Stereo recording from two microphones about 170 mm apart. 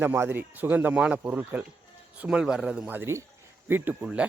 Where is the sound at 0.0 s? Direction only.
15° right (ahead or behind).